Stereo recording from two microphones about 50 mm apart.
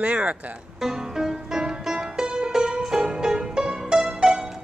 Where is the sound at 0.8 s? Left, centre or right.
Centre.